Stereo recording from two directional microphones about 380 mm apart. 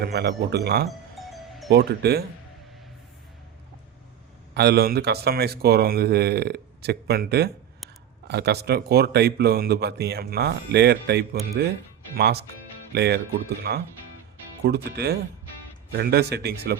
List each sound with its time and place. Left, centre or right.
0.0 s speech: right
0.9 s music: centre
1.7 s speech: right
4.5 s speech: right